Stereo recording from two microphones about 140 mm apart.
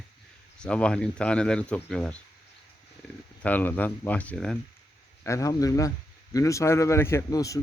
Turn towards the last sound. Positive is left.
turn(degrees=25)  # may be behind; listen again after turning